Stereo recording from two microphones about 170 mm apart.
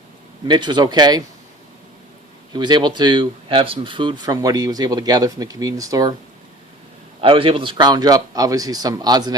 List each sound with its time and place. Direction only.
0.4 s speech: 25° right (ahead or behind)
2.5 s speech: 25° right (ahead or behind)
7.2 s speech: 30° right (ahead or behind)